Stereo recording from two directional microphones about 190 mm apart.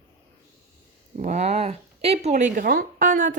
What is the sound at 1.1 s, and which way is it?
Speech, 40° right (ahead or behind).